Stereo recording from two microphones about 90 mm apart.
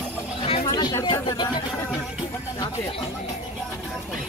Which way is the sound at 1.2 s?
55° left (ahead or behind).